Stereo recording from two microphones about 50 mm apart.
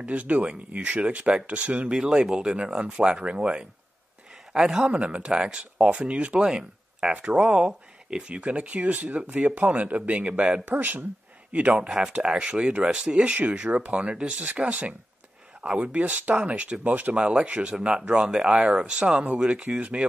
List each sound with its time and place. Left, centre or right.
0.0 s speech: right
1.9 s a man's voice: centre
4.8 s speech: right
11.5 s speech: right
17.2 s speech: centre